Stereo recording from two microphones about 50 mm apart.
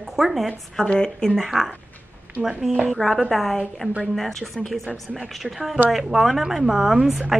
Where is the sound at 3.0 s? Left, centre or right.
Centre.